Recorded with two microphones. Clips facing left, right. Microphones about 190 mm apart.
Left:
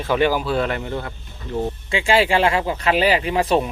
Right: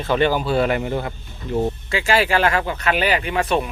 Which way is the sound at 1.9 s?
25° left (ahead or behind).